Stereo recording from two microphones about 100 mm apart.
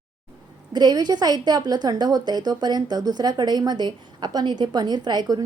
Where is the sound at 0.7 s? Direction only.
45° right (ahead or behind).